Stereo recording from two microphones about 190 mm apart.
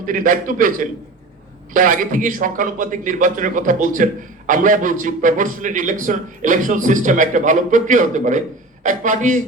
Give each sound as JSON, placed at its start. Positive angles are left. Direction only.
{"t": 0.0, "sound": "a man's voice", "side_deg": -45}